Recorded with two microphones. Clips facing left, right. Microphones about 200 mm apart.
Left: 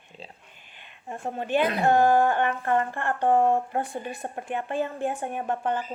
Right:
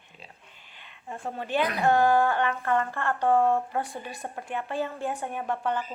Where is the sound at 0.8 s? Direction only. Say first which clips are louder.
Left 2 dB; 15° left (ahead or behind).